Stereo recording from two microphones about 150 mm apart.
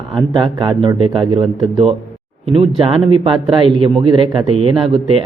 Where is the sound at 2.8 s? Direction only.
35° right (ahead or behind).